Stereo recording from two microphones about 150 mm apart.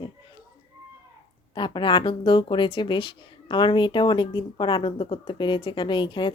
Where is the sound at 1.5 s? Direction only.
30° left (ahead or behind).